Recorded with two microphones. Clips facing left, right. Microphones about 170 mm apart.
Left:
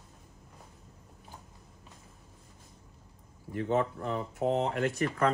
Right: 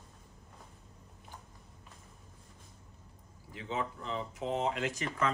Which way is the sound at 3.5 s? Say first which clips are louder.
Left 8 dB; 55° left (ahead or behind).